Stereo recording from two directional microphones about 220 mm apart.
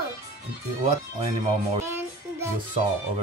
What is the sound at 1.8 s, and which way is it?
Child singing, 10° right (ahead or behind).